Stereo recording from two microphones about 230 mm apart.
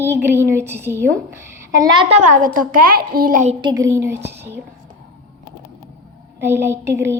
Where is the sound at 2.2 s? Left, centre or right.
Right.